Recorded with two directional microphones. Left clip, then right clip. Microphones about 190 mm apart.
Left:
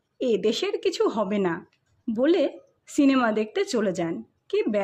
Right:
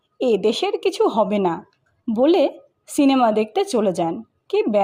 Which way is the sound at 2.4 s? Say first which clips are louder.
Right 6 dB; 20° left (ahead or behind).